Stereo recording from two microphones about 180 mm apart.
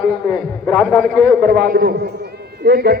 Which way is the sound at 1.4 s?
55° right (ahead or behind).